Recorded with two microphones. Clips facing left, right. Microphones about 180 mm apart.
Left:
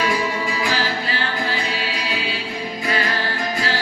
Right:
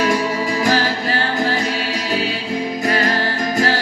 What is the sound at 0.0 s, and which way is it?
Music, 45° right (ahead or behind).